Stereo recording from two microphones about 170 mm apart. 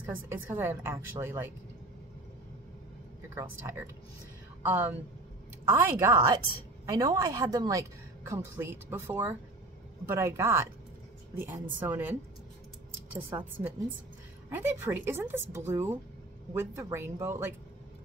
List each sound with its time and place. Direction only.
0.0 s speech: 15° right (ahead or behind)
3.3 s speech: 15° right (ahead or behind)